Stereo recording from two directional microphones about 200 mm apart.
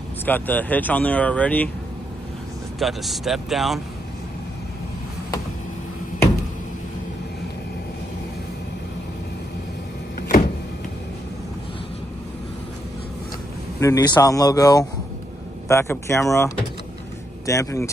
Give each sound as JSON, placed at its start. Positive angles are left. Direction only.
{"t": 0.2, "sound": "speech", "side_deg": 10}
{"t": 2.8, "sound": "speech", "side_deg": 0}
{"t": 10.2, "sound": "power windows", "side_deg": 45}
{"t": 13.7, "sound": "speech", "side_deg": 15}